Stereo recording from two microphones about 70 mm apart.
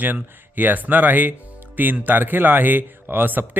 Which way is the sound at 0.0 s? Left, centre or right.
Right.